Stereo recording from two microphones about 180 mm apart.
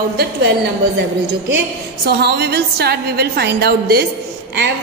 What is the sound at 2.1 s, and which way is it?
A woman's voice, 65° right (ahead or behind).